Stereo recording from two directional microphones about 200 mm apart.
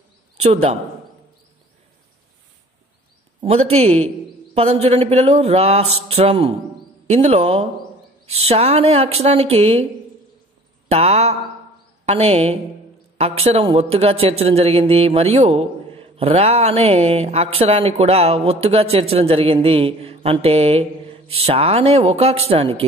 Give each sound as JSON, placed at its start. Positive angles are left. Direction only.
{"t": 0.4, "sound": "speech", "side_deg": -30}
{"t": 3.3, "sound": "a man's voice", "side_deg": -30}
{"t": 10.9, "sound": "speech", "side_deg": -30}